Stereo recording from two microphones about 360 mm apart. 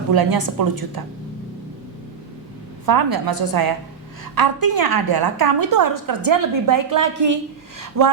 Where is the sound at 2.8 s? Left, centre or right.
Right.